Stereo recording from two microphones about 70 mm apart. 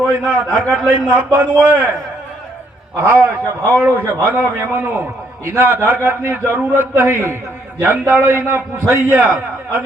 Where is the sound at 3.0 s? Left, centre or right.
Right.